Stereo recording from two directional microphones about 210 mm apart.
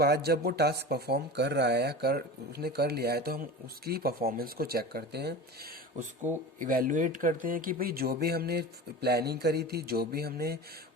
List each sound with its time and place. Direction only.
0.0 s speech: 50° right (ahead or behind)
6.2 s speech: 35° right (ahead or behind)